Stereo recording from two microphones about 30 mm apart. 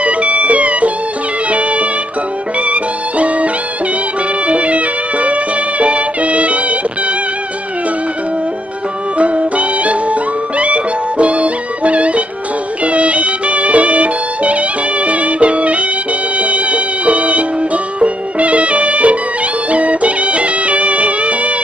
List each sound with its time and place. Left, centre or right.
0.0 s music: right
4.5 s music: right
9.2 s music: right